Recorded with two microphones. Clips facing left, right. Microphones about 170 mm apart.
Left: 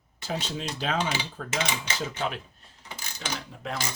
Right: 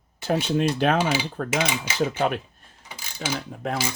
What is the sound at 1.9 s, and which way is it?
Speech, 10° right (ahead or behind).